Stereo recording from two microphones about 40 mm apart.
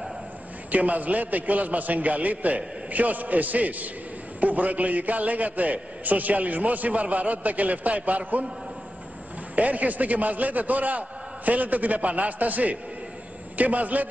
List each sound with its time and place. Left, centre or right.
0.7 s a man's voice: right
9.6 s a man's voice: right